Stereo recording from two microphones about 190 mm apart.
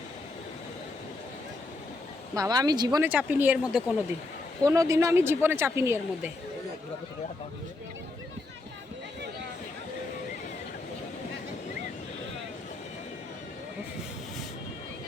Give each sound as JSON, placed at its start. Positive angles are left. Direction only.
{"t": 2.3, "sound": "speech", "side_deg": -20}
{"t": 3.1, "sound": "speech", "side_deg": -10}
{"t": 4.6, "sound": "speech", "side_deg": -15}